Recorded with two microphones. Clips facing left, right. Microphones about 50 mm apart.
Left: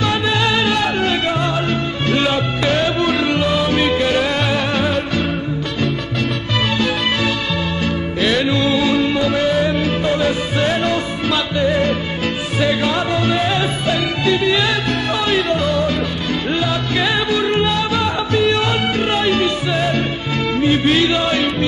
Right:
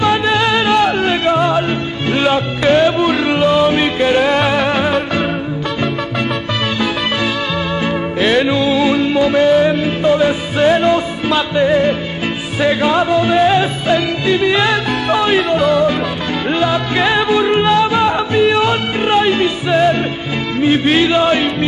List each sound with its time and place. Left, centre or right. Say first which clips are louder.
0.0 s music: right 4 dB; centre
7.8 s music: right 3 dB; centre
15.4 s music: right 5 dB; centre